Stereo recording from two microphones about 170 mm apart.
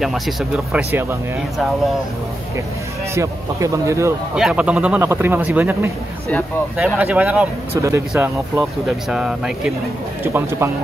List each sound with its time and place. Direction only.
0.0 s speech: centre (ahead or behind)
3.2 s speech: 20° right (ahead or behind)
4.4 s speech: 5° right (ahead or behind)